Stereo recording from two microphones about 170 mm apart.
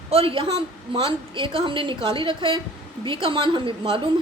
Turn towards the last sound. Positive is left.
turn(degrees=-30)  # may be behind; listen again after turning